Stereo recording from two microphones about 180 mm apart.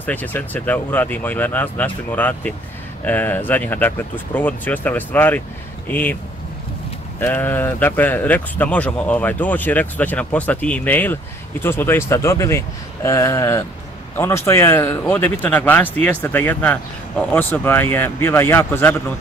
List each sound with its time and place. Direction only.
0.0 s speech: 10° left (ahead or behind)
7.2 s speech: 10° left (ahead or behind)